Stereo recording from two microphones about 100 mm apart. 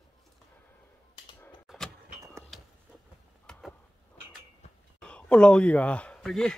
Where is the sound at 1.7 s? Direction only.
5° right (ahead or behind).